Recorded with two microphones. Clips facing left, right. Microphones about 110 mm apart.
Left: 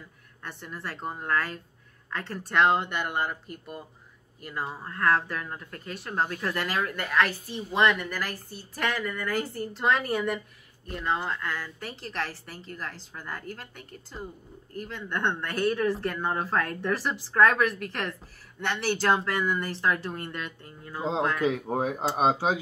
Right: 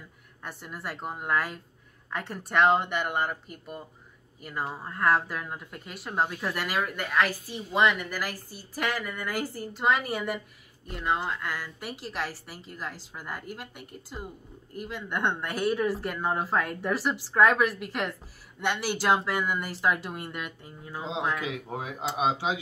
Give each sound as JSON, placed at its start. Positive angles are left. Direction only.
{"t": 0.4, "sound": "speech", "side_deg": -10}
{"t": 21.5, "sound": "speech", "side_deg": 45}